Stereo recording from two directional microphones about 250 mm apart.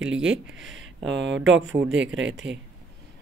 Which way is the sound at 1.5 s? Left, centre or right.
Right.